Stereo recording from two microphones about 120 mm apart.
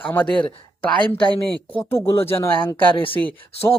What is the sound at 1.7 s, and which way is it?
Speech, 20° left (ahead or behind).